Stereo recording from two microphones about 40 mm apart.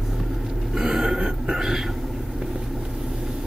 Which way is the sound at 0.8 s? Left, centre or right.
Centre.